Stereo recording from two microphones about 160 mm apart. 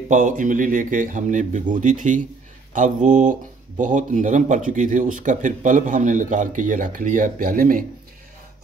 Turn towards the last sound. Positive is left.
turn(degrees=-60)  # may be behind; listen again after turning